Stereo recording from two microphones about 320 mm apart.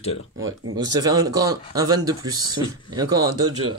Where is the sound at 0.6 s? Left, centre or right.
Right.